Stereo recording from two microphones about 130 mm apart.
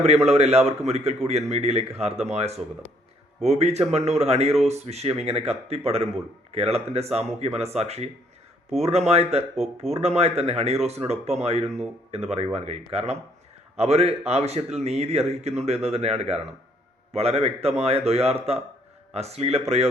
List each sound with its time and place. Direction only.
0.0 s speech: 55° right (ahead or behind)